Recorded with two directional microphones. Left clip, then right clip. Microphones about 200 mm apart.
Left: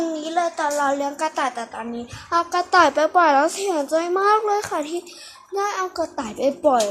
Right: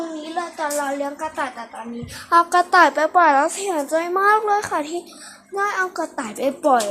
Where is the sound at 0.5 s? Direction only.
30° left (ahead or behind).